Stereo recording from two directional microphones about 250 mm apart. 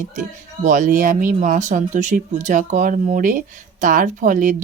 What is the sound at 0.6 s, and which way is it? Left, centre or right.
Speech, right.